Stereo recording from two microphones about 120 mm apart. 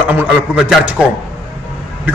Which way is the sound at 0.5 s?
5° right (ahead or behind).